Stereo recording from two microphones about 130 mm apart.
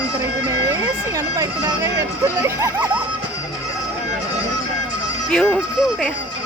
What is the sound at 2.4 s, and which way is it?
Speech, 15° right (ahead or behind).